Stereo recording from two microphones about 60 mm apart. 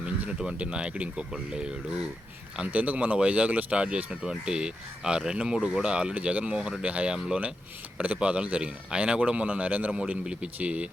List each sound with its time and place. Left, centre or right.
0.0 s speech: centre
2.6 s speech: right